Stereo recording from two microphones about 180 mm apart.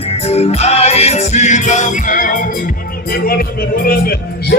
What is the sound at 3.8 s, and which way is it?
Speech, 55° left (ahead or behind).